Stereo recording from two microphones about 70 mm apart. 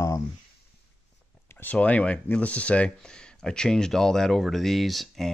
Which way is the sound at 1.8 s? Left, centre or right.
Left.